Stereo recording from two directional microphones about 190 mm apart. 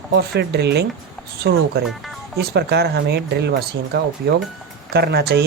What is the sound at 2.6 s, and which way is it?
Speech, 60° right (ahead or behind).